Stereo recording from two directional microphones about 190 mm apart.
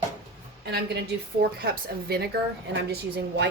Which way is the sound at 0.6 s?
60° right (ahead or behind).